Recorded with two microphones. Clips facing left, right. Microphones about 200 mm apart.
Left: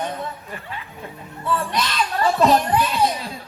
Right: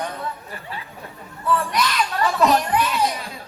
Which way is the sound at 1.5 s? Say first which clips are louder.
Right 1 dB; 30° left (ahead or behind).